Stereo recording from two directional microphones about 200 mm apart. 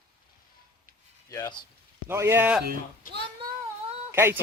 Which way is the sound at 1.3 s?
15° left (ahead or behind).